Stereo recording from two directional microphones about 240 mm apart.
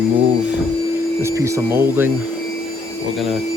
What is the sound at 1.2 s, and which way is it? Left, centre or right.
Speech, centre.